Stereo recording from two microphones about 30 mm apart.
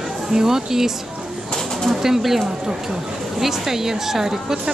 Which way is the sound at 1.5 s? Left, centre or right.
Centre.